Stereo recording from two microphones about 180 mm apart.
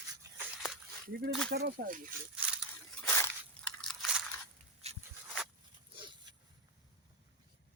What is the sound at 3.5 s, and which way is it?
Biting, 5° left (ahead or behind).